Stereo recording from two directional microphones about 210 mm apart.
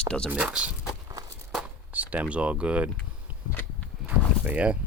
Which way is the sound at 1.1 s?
15° right (ahead or behind).